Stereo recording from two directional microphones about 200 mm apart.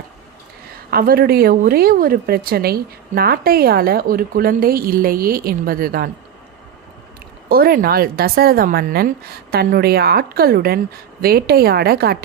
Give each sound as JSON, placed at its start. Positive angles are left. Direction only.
{"t": 0.9, "sound": "a woman's voice", "side_deg": -50}
{"t": 7.5, "sound": "a woman's voice", "side_deg": -50}